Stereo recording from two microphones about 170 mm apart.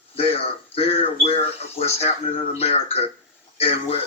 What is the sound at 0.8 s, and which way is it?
Speech, 35° left (ahead or behind).